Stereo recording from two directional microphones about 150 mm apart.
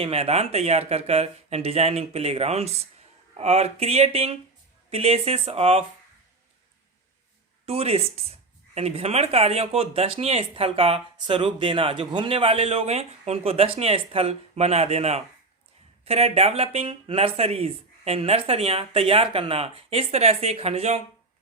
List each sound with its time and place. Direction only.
0.0 s speech: 45° right (ahead or behind)
7.6 s speech: 40° right (ahead or behind)